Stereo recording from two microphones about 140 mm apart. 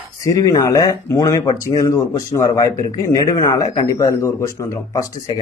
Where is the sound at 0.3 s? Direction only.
25° left (ahead or behind).